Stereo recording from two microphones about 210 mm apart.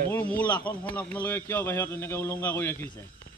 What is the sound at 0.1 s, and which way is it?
A man's voice, 5° left (ahead or behind).